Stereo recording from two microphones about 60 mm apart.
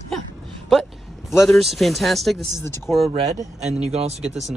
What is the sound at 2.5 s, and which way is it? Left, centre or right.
Speech, left.